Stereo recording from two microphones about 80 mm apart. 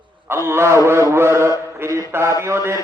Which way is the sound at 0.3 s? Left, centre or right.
Right.